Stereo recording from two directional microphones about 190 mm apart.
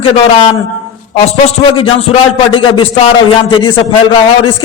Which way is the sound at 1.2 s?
30° left (ahead or behind).